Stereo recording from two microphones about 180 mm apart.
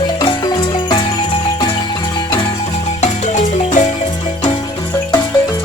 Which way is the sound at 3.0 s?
40° left (ahead or behind).